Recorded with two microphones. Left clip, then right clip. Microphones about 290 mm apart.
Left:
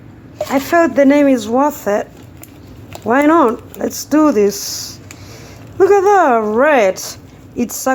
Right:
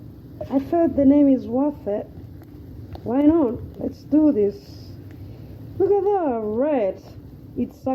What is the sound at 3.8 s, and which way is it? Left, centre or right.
Speech, left.